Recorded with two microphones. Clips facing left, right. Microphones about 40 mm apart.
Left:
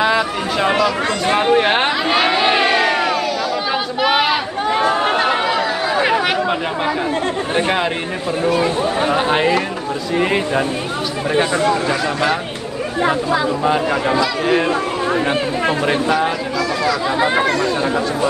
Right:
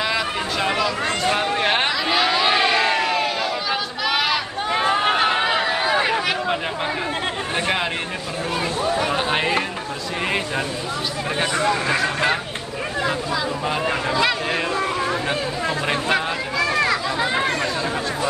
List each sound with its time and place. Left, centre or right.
0.0 s chatter: centre
1.2 s speech: left
1.5 s speech: centre
1.9 s a sound: left
4.0 s a sound: left
5.0 s chatter: centre
5.4 s a sound: centre
8.5 s speech: left
10.1 s speech: centre
11.5 s speech: left
11.9 s speech: right
13.8 s speech: left
17.3 s speech: left